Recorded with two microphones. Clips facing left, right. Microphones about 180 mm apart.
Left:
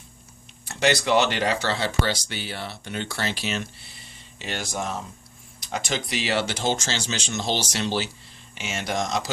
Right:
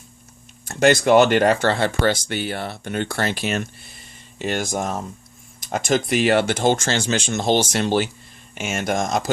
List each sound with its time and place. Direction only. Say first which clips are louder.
0.6 s speech: right 6 dB; 50° right (ahead or behind)